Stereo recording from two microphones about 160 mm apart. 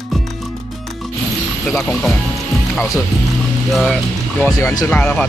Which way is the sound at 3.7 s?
Centre (ahead or behind).